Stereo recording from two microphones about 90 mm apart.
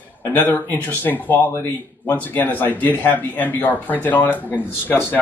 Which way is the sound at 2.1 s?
20° left (ahead or behind).